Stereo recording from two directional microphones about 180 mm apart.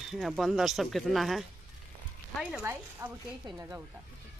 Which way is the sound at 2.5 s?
15° right (ahead or behind).